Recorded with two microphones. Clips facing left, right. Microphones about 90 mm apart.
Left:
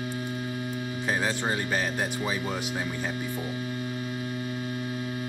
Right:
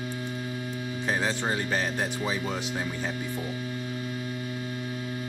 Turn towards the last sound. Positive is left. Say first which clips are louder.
# left 2 dB
turn(degrees=10)  # may be behind; listen again after turning